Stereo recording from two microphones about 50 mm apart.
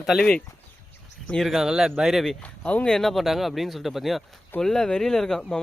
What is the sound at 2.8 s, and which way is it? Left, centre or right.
Speech, centre.